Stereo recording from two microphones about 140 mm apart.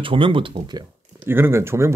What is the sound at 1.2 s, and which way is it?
Speech, 15° right (ahead or behind).